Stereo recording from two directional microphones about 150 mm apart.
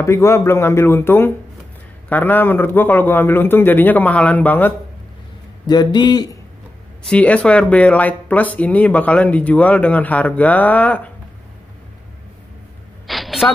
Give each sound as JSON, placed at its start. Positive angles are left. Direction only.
{"t": 0.0, "sound": "speech", "side_deg": 20}
{"t": 5.7, "sound": "a man's voice", "side_deg": 30}
{"t": 7.1, "sound": "speech", "side_deg": 10}
{"t": 13.0, "sound": "a sound", "side_deg": 0}